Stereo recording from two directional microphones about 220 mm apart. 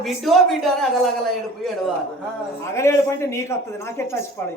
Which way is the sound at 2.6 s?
15° left (ahead or behind).